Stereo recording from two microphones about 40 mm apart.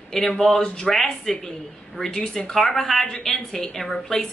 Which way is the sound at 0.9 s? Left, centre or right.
Centre.